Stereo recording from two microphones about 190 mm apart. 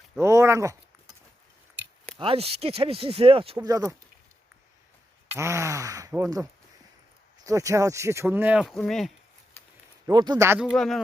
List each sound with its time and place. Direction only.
0.2 s speech: 15° right (ahead or behind)
2.1 s speech: 30° right (ahead or behind)
3.7 s speech: 20° right (ahead or behind)
5.4 s speech: 15° right (ahead or behind); by 9.1 s centre (ahead or behind)
10.1 s speech: 20° right (ahead or behind)
10.7 s speech: centre (ahead or behind)